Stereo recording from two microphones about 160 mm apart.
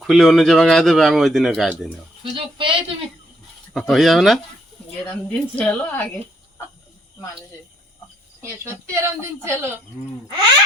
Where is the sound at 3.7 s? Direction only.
Centre (ahead or behind).